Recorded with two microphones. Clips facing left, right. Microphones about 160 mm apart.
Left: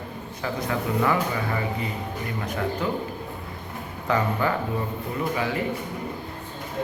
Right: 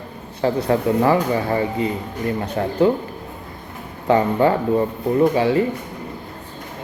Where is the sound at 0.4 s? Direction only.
30° right (ahead or behind).